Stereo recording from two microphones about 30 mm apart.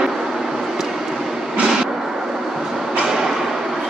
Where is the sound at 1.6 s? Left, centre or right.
Centre.